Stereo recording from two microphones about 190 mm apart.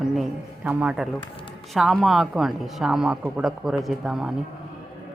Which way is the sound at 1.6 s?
Centre (ahead or behind).